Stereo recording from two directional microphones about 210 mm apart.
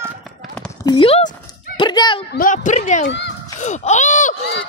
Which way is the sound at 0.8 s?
25° left (ahead or behind).